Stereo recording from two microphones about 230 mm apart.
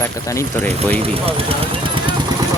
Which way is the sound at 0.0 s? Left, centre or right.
Centre.